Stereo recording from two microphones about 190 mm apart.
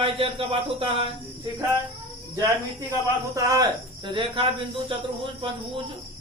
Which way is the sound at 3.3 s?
20° right (ahead or behind).